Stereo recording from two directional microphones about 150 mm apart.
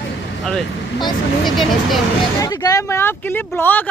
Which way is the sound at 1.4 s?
Centre (ahead or behind).